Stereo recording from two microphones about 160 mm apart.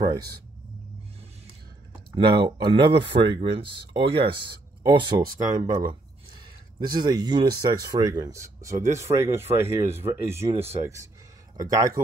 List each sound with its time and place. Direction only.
2.1 s speech: 30° right (ahead or behind)
10.6 s speech: 40° right (ahead or behind)
11.5 s speech: 20° right (ahead or behind)